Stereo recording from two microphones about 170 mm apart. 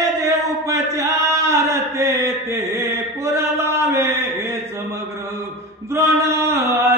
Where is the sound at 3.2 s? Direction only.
15° right (ahead or behind).